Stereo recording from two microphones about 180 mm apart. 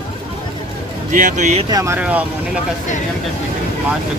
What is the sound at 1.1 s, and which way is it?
Speech, 45° right (ahead or behind).